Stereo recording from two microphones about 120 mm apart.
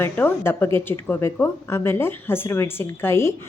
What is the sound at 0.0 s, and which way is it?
Speech, 20° left (ahead or behind).